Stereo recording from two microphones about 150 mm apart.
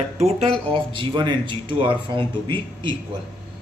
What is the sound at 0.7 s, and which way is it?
A man's voice, 30° right (ahead or behind).